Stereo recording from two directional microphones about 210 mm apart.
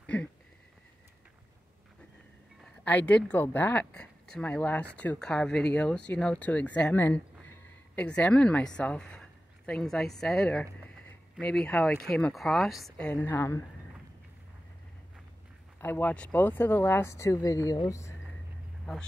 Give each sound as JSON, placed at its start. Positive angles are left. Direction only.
{"t": 0.0, "sound": "a sound", "side_deg": 5}
{"t": 2.8, "sound": "speech", "side_deg": 5}
{"t": 15.8, "sound": "speech", "side_deg": 10}